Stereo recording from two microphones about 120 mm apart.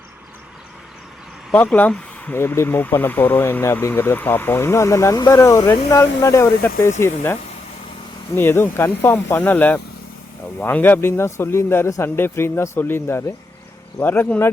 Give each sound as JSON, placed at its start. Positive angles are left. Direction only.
{"t": 1.5, "sound": "speech", "side_deg": 15}
{"t": 8.4, "sound": "speech", "side_deg": 20}